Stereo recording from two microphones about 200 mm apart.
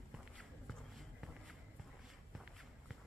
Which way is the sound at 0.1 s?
Centre (ahead or behind).